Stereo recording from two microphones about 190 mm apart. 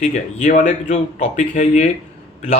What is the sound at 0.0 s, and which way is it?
A man's voice, 40° left (ahead or behind).